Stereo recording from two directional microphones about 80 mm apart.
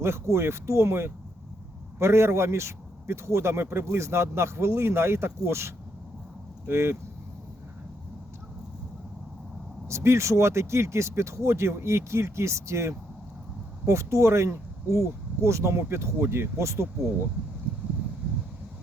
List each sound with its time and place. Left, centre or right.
0.0 s a man's voice: right
9.9 s a man's voice: right